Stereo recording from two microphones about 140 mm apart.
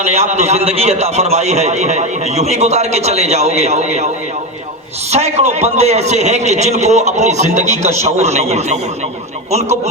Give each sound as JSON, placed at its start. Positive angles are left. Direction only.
{"t": 0.0, "sound": "a man's voice", "side_deg": -50}
{"t": 5.1, "sound": "a man's voice", "side_deg": -50}